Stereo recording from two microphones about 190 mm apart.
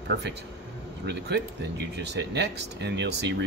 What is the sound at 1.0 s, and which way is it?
Speech, 65° right (ahead or behind).